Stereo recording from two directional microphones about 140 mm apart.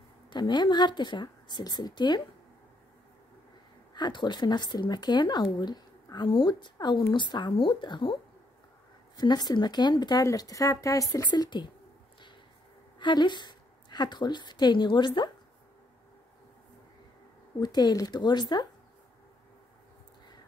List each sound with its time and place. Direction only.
0.3 s speech: 30° left (ahead or behind)
3.9 s speech: 30° left (ahead or behind)
13.0 s a woman's voice: 30° left (ahead or behind)
17.6 s speech: 30° left (ahead or behind)